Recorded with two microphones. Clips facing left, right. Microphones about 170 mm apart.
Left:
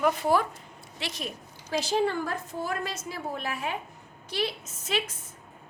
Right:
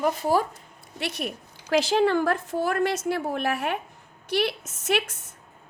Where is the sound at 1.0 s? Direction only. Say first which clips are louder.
Right 5 dB; 65° right (ahead or behind).